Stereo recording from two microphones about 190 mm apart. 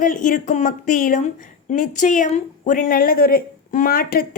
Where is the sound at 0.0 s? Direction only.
45° left (ahead or behind).